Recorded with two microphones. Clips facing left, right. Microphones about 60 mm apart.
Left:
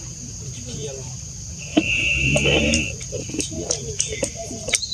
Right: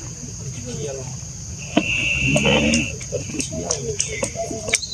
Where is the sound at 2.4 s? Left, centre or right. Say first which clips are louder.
Right 2 dB; right.